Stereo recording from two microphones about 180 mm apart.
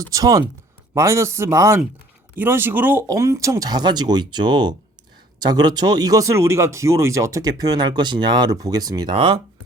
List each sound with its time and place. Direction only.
0.0 s speech: 20° right (ahead or behind)